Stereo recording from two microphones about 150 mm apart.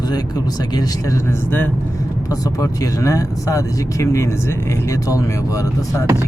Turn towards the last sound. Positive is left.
turn(degrees=20)  # may be behind; listen again after turning